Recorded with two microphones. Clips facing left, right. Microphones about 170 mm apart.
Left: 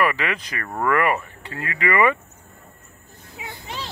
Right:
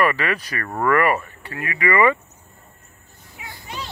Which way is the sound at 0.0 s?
15° left (ahead or behind).